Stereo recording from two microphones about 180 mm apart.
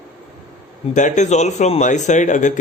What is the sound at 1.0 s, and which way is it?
Speech, 45° left (ahead or behind).